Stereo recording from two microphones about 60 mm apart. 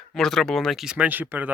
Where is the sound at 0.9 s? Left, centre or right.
Right.